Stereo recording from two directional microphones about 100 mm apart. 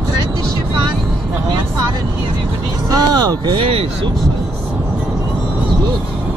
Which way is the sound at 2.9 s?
40° right (ahead or behind).